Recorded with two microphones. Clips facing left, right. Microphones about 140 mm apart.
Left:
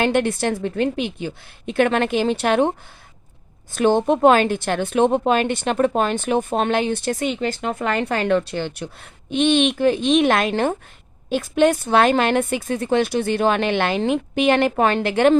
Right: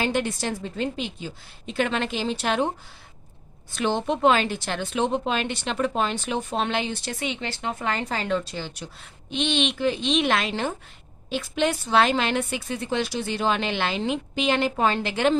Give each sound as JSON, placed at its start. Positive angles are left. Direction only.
{"t": 0.0, "sound": "speech", "side_deg": 60}
{"t": 3.7, "sound": "speech", "side_deg": 50}